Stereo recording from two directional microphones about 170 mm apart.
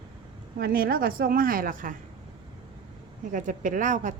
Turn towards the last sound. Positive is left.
turn(degrees=-45)  # may be behind; listen again after turning